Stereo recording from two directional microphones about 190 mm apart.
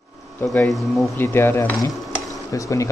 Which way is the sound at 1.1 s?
10° left (ahead or behind).